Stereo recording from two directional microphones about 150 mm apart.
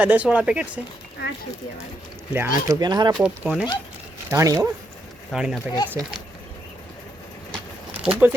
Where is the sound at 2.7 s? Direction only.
25° right (ahead or behind).